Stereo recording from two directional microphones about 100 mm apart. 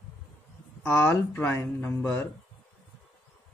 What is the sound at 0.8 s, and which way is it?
Speech, 20° left (ahead or behind).